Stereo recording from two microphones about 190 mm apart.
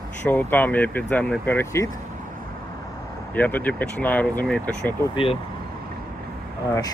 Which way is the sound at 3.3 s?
10° left (ahead or behind).